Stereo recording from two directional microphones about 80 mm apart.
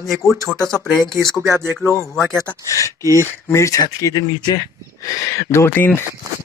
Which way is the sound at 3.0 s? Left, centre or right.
Right.